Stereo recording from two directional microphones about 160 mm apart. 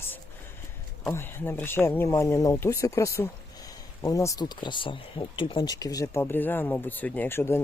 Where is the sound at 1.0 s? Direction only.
15° left (ahead or behind).